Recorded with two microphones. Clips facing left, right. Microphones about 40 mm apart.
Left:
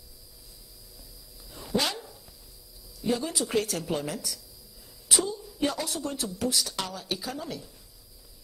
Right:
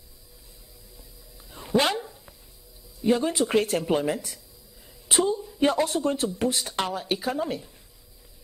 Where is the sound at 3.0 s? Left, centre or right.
Right.